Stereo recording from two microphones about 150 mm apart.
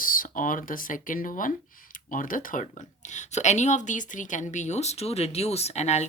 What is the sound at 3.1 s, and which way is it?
A woman's voice, 50° left (ahead or behind).